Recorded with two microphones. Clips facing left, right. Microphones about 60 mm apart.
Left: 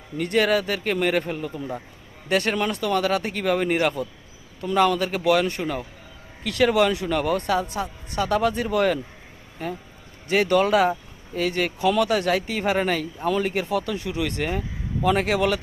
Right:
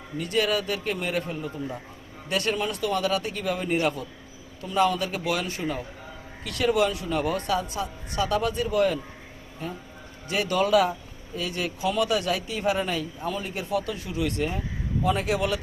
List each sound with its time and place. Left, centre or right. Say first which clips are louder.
0.2 s speech: left 4 dB; left
2.5 s speech: left 3 dB; left
3.0 s speech: left 3 dB; left
3.3 s speech: left 5 dB; left
4.8 s a woman's voice: left 3 dB; left
5.2 s speech: left 7 dB; left
7.6 s a woman's voice: left 3 dB; left
8.4 s speech: left 2 dB; left
10.2 s speech: left 5 dB; left
10.7 s a woman's voice: left 2 dB; left
11.3 s speech: left 6 dB; left
12.1 s speech: left 4 dB; left